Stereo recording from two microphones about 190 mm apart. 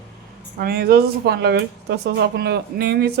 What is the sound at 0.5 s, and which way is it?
Speech, 50° right (ahead or behind).